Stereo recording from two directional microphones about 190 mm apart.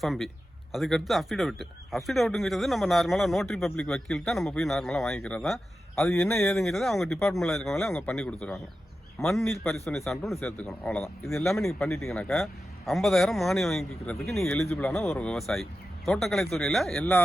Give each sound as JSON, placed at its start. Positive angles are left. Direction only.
{"t": 0.0, "sound": "speech", "side_deg": 0}